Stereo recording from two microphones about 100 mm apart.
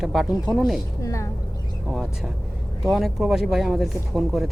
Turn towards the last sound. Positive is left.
turn(degrees=0)  # may be behind; listen again after turning